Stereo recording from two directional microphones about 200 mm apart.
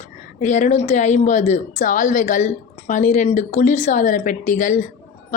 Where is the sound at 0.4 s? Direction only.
35° left (ahead or behind).